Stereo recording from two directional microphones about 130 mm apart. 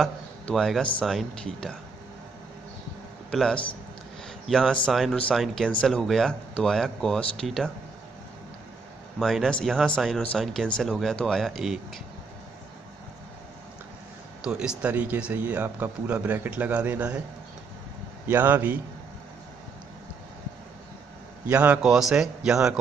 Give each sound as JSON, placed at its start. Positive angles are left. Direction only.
{"t": 0.0, "sound": "a man's voice", "side_deg": 5}
{"t": 3.3, "sound": "a man's voice", "side_deg": 5}
{"t": 9.2, "sound": "speech", "side_deg": 0}
{"t": 14.4, "sound": "speech", "side_deg": -5}
{"t": 18.2, "sound": "speech", "side_deg": -15}
{"t": 21.5, "sound": "speech", "side_deg": -15}